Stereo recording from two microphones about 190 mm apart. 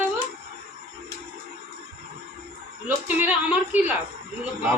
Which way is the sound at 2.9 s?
10° right (ahead or behind).